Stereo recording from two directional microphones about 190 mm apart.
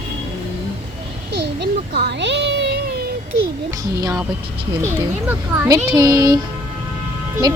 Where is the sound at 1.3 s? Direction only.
60° right (ahead or behind).